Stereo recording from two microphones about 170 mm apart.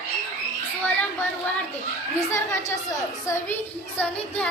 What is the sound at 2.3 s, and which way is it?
Speech, 15° left (ahead or behind).